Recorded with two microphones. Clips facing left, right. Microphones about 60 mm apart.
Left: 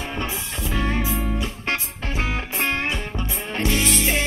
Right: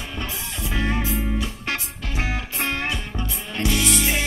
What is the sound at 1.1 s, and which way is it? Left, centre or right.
Music, left.